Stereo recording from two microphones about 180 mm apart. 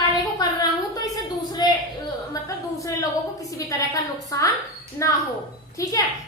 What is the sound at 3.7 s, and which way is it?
A woman's voice, 20° left (ahead or behind).